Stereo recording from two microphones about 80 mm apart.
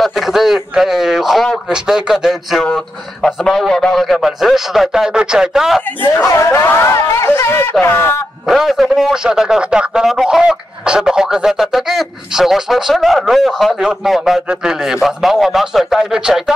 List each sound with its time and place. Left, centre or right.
0.0 s a man's voice: centre
2.6 s a man's voice: centre
6.2 s speech: left
8.5 s a man's voice: centre